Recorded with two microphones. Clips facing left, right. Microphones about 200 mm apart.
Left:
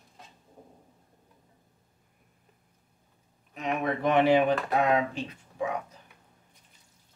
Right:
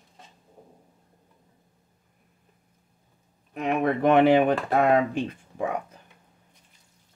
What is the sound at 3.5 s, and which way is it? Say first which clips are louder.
Speech: right 5 dB; 55° right (ahead or behind).